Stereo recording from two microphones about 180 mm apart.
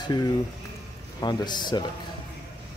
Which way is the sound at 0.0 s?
25° left (ahead or behind).